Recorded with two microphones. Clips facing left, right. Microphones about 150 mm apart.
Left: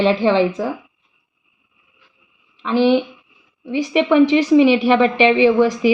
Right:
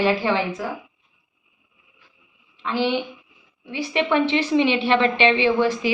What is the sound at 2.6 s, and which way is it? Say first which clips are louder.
A woman's voice: left 8 dB; 15° left (ahead or behind).